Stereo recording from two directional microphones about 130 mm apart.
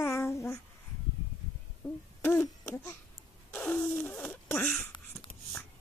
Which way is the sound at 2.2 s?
10° left (ahead or behind).